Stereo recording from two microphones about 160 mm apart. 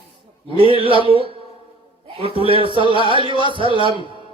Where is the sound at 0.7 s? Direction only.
35° right (ahead or behind).